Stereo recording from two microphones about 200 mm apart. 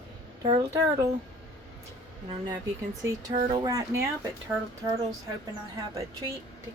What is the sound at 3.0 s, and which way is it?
Speech, 15° right (ahead or behind).